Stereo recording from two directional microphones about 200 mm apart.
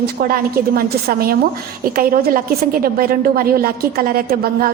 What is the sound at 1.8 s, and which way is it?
A woman's voice, 45° right (ahead or behind).